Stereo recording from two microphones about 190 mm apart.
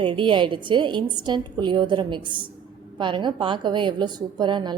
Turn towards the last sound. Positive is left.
turn(degrees=-25)  # may be behind; listen again after turning